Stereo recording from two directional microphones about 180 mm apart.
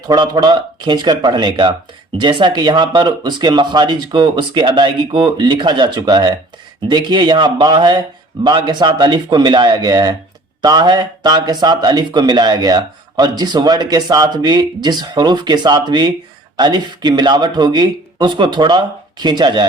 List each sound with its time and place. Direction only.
0.1 s speech: 25° right (ahead or behind)